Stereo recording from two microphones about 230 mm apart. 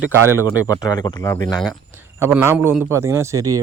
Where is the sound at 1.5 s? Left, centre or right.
Centre.